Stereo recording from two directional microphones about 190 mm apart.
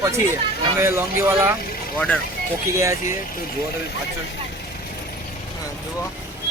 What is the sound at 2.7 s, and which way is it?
Speech, 15° right (ahead or behind).